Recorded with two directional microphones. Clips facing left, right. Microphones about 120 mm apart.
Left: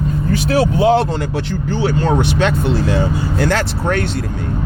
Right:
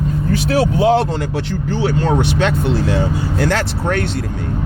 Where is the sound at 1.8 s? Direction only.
40° left (ahead or behind).